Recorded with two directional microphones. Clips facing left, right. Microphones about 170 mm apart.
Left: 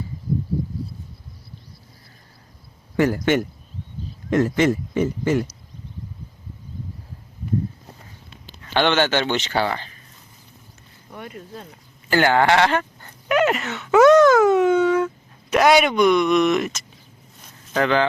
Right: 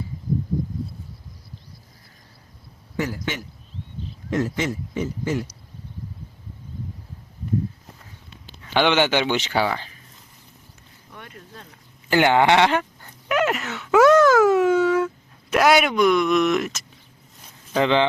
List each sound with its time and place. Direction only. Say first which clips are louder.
3.0 s speech: left 9 dB; 55° left (ahead or behind)
8.6 s speech: even; 10° right (ahead or behind)
11.2 s speech: left 7 dB; 10° left (ahead or behind)
12.1 s speech: even; 15° right (ahead or behind)
13.0 s speech: left 3 dB; centre (ahead or behind)